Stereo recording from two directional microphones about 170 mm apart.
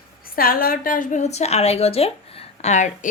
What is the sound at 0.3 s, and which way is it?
A woman's voice, 60° left (ahead or behind).